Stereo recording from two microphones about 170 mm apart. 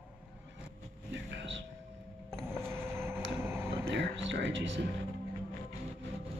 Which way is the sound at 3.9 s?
90° right.